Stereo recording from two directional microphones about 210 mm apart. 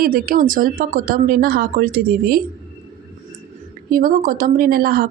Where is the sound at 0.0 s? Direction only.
45° right (ahead or behind).